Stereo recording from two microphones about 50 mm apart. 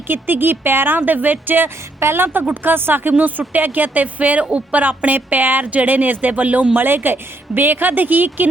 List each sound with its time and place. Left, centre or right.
0.1 s a woman's voice: right
6.7 s speech: right